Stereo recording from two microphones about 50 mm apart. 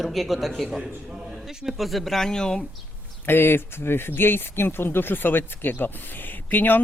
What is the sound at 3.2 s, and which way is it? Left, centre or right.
Speech, left.